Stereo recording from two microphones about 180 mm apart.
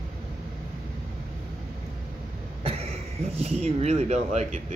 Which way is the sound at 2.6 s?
35° right (ahead or behind).